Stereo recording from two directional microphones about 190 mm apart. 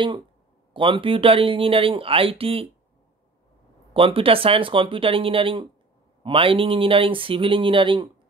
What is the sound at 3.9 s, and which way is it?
Speech, 30° right (ahead or behind).